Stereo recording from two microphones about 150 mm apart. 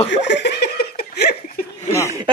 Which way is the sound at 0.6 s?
90° left.